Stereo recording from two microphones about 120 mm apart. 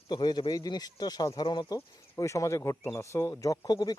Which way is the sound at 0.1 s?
35° left (ahead or behind).